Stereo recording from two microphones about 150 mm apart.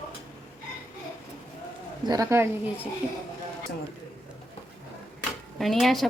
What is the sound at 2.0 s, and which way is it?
Speech, 20° right (ahead or behind).